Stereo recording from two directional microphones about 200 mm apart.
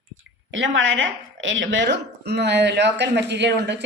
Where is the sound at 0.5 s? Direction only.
70° right (ahead or behind).